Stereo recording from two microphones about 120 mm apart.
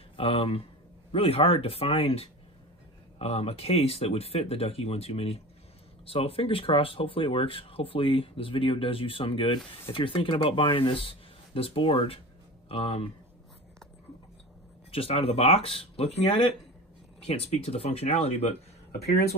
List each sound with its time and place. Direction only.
0.2 s speech: 50° left (ahead or behind)
14.9 s speech: 50° left (ahead or behind)